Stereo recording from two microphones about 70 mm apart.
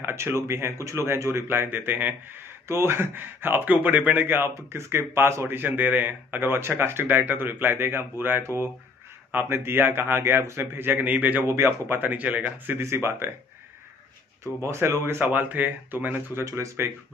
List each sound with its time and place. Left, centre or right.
0.0 s speech: right
2.7 s speech: right
4.6 s speech: right
11.4 s speech: right
12.8 s speech: right
14.4 s speech: right
16.4 s speech: right